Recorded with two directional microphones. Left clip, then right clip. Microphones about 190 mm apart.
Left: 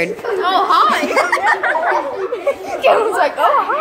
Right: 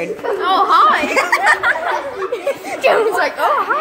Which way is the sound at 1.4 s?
30° right (ahead or behind).